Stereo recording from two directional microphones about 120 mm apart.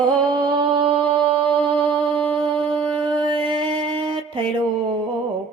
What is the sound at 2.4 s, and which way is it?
Music, 45° right (ahead or behind).